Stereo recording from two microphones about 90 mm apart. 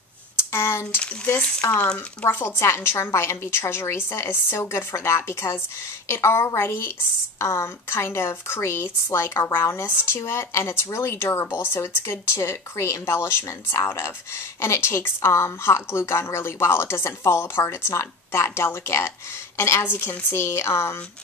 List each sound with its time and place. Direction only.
0.4 s a woman's voice: 25° left (ahead or behind)